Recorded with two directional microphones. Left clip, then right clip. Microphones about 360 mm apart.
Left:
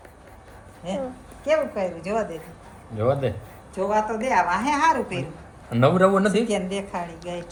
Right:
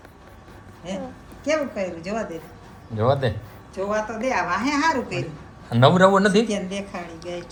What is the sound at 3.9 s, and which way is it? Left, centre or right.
A man's voice, centre.